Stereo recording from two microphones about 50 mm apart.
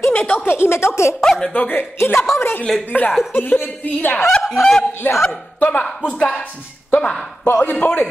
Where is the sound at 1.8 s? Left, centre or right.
Left.